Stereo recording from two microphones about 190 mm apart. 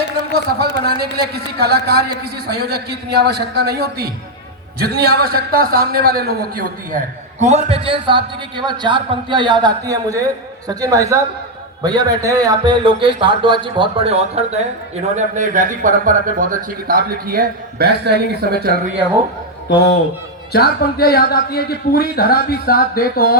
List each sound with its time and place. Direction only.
0.6 s a man's voice: 55° right (ahead or behind)
20.5 s speech: 55° left (ahead or behind)